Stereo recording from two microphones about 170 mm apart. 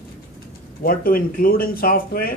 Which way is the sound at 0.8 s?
60° left (ahead or behind).